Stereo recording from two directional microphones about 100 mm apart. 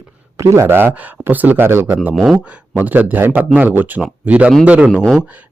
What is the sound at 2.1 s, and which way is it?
Speech, 5° right (ahead or behind).